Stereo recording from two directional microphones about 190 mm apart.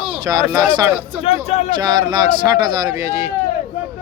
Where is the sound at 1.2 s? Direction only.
30° left (ahead or behind).